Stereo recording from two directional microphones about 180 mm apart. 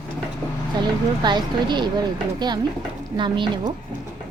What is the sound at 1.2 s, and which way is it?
Speech, 25° right (ahead or behind).